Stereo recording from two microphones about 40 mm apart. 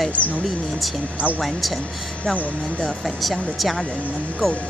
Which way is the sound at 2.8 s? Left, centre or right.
Centre.